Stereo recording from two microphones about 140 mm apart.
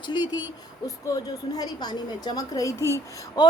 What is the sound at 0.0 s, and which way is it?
A woman's voice, 30° left (ahead or behind).